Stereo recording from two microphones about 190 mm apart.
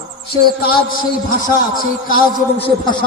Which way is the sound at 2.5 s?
25° left (ahead or behind).